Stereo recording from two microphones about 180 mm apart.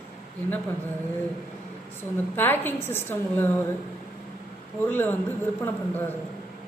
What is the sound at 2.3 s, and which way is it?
A woman's voice, 10° left (ahead or behind).